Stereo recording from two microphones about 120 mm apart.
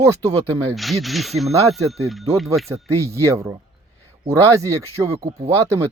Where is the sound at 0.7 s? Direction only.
Centre (ahead or behind).